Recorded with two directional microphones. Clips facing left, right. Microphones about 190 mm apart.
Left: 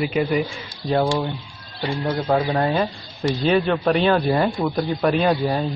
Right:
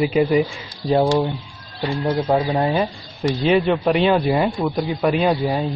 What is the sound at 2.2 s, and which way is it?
Speech, 15° right (ahead or behind).